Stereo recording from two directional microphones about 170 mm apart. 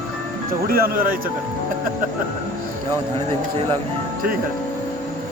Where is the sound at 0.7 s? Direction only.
60° right (ahead or behind).